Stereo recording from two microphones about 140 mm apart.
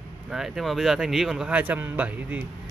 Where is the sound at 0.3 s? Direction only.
Centre (ahead or behind).